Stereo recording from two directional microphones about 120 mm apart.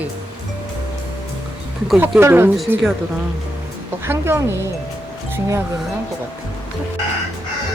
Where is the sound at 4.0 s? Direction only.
20° right (ahead or behind).